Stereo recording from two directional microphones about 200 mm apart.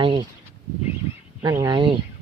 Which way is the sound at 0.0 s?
25° right (ahead or behind).